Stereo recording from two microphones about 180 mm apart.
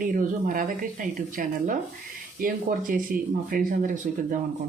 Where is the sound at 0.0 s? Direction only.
50° right (ahead or behind).